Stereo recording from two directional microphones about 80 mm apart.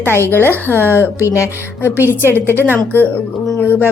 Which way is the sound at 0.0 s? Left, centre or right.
Left.